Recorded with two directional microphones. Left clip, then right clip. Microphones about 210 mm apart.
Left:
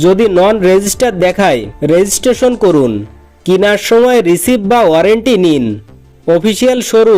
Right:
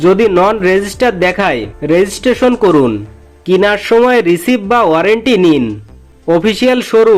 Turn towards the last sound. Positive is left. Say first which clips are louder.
# even
turn(degrees=40)  # may be behind; listen again after turning